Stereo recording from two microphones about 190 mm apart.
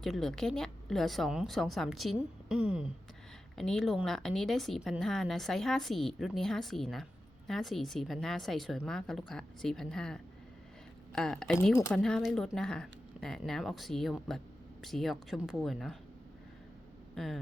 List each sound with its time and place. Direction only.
0.0 s a woman's voice: centre (ahead or behind)
17.2 s a woman's voice: centre (ahead or behind)